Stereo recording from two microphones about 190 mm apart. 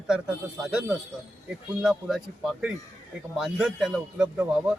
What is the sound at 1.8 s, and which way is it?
A man's voice, 5° right (ahead or behind).